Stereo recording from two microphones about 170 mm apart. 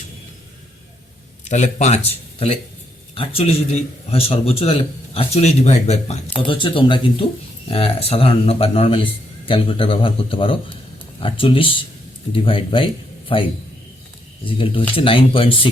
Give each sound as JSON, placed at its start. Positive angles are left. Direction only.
{"t": 1.5, "sound": "speech", "side_deg": 45}
{"t": 3.2, "sound": "a man's voice", "side_deg": 35}
{"t": 6.5, "sound": "a man's voice", "side_deg": 30}
{"t": 14.4, "sound": "a man's voice", "side_deg": 30}